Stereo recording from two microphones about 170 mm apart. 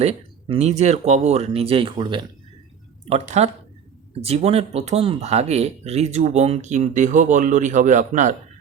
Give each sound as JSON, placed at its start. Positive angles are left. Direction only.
{"t": 0.0, "sound": "speech", "side_deg": -35}
{"t": 3.1, "sound": "speech", "side_deg": -40}